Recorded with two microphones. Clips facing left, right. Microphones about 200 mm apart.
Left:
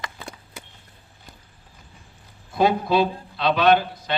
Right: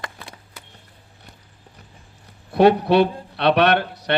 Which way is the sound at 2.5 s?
70° right (ahead or behind).